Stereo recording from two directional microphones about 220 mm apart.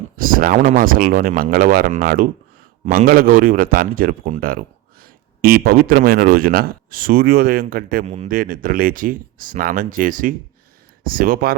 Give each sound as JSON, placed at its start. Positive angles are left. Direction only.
{"t": 0.2, "sound": "speech", "side_deg": -40}